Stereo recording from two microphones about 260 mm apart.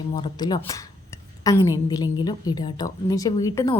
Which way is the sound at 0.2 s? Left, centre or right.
Centre.